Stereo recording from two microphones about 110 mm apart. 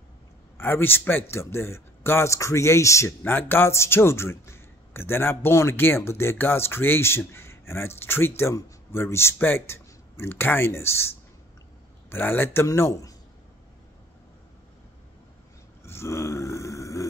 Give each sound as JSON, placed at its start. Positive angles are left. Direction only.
{"t": 0.6, "sound": "speech", "side_deg": 20}
{"t": 12.1, "sound": "speech", "side_deg": 20}
{"t": 15.8, "sound": "grunt", "side_deg": 25}